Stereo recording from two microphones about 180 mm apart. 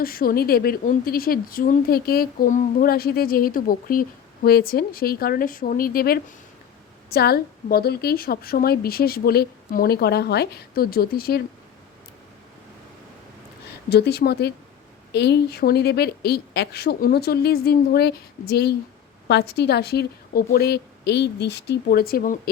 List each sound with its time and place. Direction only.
0.0 s a woman's voice: 55° left (ahead or behind)
13.9 s a woman's voice: 65° left (ahead or behind)